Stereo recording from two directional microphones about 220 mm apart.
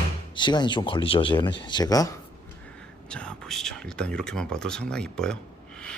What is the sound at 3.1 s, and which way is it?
Speech, 5° left (ahead or behind).